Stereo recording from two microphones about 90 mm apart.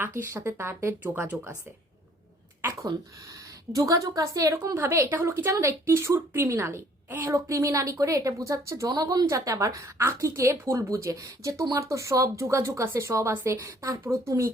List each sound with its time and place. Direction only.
0.0 s speech: 25° right (ahead or behind)
2.8 s speech: 40° right (ahead or behind)
8.9 s speech: 45° right (ahead or behind)